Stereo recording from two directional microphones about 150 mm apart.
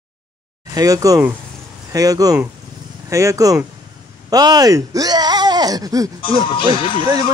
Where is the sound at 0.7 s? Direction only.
25° right (ahead or behind).